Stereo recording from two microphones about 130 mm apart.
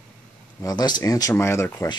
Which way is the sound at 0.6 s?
30° left (ahead or behind).